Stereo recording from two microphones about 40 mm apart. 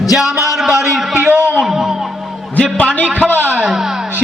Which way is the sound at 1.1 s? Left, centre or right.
Right.